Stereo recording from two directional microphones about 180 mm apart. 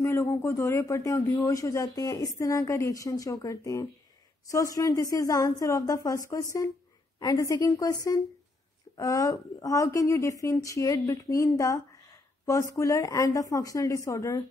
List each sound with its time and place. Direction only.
0.0 s a woman's voice: 15° left (ahead or behind)